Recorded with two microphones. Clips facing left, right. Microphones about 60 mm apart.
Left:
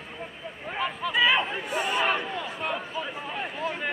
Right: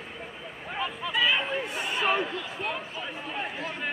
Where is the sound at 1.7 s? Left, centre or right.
Left.